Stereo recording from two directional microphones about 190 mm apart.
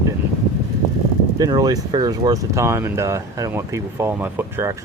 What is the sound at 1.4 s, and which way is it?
Speech, 20° right (ahead or behind).